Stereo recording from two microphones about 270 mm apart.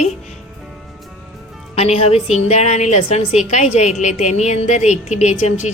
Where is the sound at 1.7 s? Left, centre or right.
Left.